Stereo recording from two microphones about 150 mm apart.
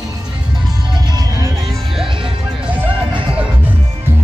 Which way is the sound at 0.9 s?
25° right (ahead or behind).